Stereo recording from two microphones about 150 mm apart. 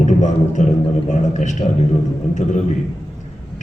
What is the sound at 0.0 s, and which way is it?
A man's voice, 55° left (ahead or behind).